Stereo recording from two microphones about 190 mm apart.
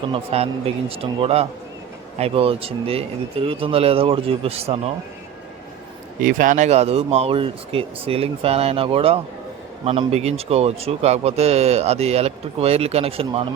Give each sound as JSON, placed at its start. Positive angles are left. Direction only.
{"t": 0.1, "sound": "speech", "side_deg": -30}
{"t": 6.2, "sound": "speech", "side_deg": -45}